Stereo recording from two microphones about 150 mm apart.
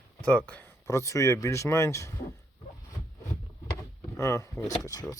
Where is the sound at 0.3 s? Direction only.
10° left (ahead or behind).